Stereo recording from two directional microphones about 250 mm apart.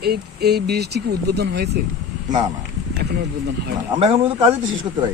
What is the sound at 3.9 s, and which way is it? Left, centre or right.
Speech, centre.